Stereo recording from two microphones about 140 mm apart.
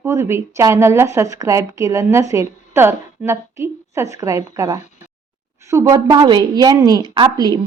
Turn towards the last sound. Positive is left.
turn(degrees=-35)  # may be behind; listen again after turning